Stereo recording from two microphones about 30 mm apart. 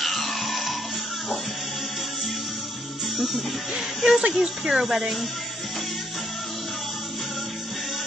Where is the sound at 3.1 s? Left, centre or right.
Centre.